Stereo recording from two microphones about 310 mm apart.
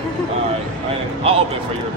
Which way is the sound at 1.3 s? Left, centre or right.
Centre.